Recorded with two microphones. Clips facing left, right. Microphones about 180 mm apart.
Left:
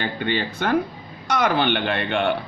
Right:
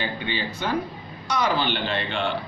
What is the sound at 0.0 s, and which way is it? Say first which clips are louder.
Speech: left 4 dB; 55° left (ahead or behind).